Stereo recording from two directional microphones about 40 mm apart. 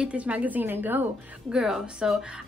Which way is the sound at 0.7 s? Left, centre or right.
Right.